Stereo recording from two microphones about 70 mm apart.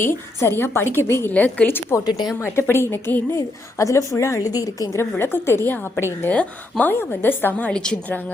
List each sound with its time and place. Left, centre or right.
0.0 s a woman's voice: left
1.3 s a woman's voice: centre
1.6 s a woman's voice: left
2.0 s speech: left
2.4 s a woman's voice: left
3.3 s a woman's voice: left
4.4 s a woman's voice: left
4.9 s a woman's voice: left
6.3 s a woman's voice: centre
7.0 s a woman's voice: left
7.7 s a woman's voice: centre